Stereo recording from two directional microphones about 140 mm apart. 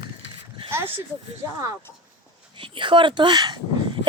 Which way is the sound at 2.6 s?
35° right (ahead or behind).